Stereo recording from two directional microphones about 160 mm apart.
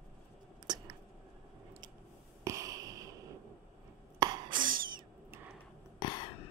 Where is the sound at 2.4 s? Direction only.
20° right (ahead or behind).